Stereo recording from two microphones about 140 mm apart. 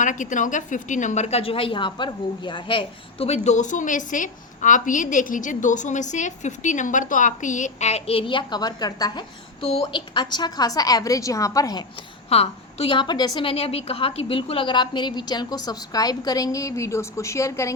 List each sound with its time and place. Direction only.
0.0 s a woman's voice: 65° left (ahead or behind); by 9.2 s 30° left (ahead or behind)
9.6 s a woman's voice: 40° left (ahead or behind); by 11.9 s 25° left (ahead or behind)
12.3 s a woman's voice: 45° left (ahead or behind); by 17.7 s 20° left (ahead or behind)